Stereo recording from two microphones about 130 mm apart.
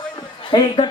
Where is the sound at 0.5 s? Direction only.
40° left (ahead or behind).